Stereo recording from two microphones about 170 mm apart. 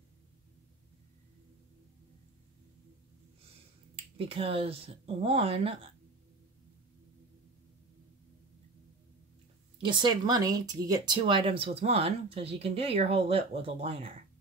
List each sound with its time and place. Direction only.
4.2 s speech: 35° right (ahead or behind)
9.8 s speech: 25° right (ahead or behind)